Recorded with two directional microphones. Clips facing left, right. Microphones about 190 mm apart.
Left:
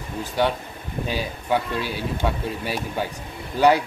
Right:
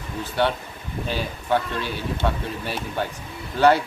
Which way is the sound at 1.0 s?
10° left (ahead or behind).